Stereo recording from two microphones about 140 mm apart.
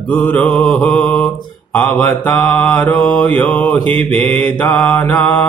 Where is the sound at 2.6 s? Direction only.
10° left (ahead or behind).